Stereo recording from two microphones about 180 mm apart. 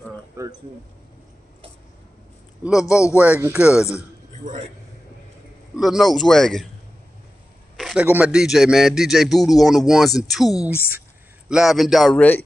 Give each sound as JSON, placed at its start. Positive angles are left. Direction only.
{"t": 0.4, "sound": "a sound", "side_deg": -15}
{"t": 2.6, "sound": "a man's voice", "side_deg": -5}
{"t": 4.4, "sound": "a man's voice", "side_deg": -45}
{"t": 5.8, "sound": "a man's voice", "side_deg": 0}
{"t": 7.7, "sound": "a man's voice", "side_deg": 0}